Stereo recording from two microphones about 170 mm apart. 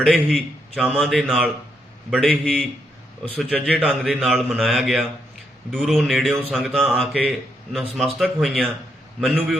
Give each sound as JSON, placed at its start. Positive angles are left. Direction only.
{"t": 0.0, "sound": "a man's voice", "side_deg": 0}